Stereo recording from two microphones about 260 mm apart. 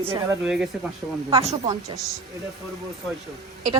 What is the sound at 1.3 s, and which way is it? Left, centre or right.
Speech, right.